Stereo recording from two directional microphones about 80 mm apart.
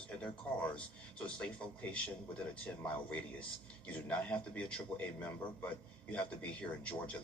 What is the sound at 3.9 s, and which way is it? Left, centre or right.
A man's voice, centre.